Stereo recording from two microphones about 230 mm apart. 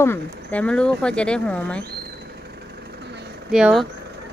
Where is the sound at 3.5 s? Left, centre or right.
Centre.